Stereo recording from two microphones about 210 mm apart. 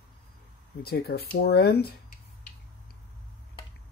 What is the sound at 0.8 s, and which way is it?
Speech, 45° left (ahead or behind).